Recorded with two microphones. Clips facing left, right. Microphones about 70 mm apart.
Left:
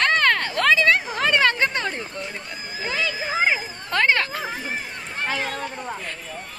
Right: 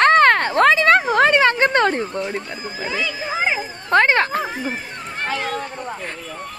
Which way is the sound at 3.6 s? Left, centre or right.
Right.